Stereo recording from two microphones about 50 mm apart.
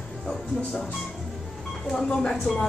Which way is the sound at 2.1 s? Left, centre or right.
Centre.